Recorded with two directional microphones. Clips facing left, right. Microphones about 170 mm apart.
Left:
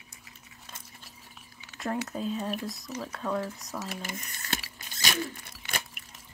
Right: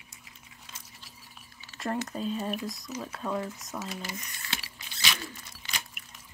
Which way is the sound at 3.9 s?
50° left (ahead or behind).